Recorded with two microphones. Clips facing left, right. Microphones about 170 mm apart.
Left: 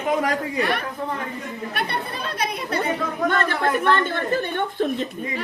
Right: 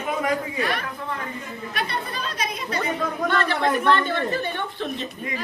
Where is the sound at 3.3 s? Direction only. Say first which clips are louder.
Even; 45° left (ahead or behind).